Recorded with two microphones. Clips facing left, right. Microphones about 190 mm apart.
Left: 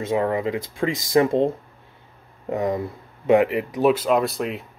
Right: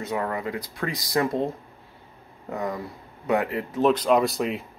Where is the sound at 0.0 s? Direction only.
25° left (ahead or behind).